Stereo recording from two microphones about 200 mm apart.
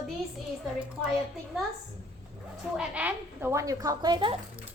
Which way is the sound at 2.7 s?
5° right (ahead or behind).